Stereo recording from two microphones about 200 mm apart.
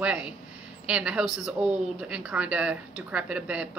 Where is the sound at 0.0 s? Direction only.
5° right (ahead or behind).